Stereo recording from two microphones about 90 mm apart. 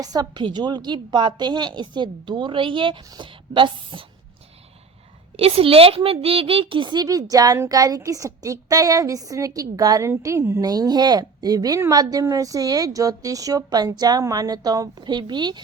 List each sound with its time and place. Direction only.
0.0 s a woman's voice: 45° right (ahead or behind); by 4.0 s 65° right (ahead or behind)
5.4 s a woman's voice: 90° right; by 10.1 s 40° right (ahead or behind)
10.2 s a woman's voice: 30° right (ahead or behind)
10.6 s a woman's voice: 45° right (ahead or behind)